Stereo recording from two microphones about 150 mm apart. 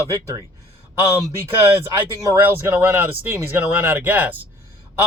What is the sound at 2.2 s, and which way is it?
Speech, 20° right (ahead or behind).